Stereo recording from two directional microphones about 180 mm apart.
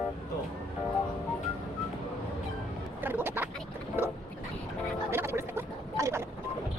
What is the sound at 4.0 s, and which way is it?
Boat, 10° right (ahead or behind).